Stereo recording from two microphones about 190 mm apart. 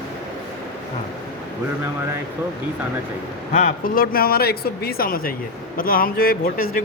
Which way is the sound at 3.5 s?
45° left (ahead or behind).